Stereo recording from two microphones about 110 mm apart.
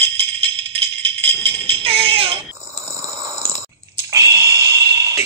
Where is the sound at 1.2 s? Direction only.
60° right (ahead or behind).